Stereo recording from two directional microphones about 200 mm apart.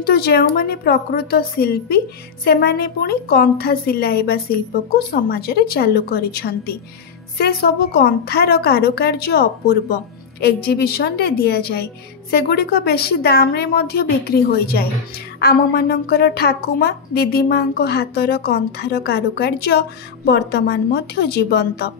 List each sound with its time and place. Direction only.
0.0 s a woman's voice: 50° left (ahead or behind)